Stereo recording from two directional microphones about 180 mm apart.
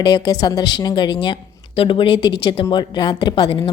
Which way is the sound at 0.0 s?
20° left (ahead or behind).